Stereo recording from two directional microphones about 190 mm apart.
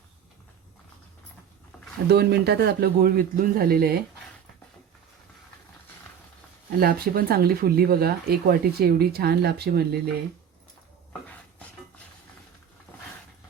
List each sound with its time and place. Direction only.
2.0 s a man's voice: 60° right (ahead or behind)
6.7 s speech: 50° right (ahead or behind)